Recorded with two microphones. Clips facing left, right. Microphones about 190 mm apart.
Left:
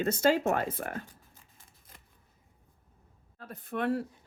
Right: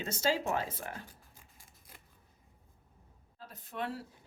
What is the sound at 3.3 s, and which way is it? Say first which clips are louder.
Speech: left 6 dB; 55° left (ahead or behind).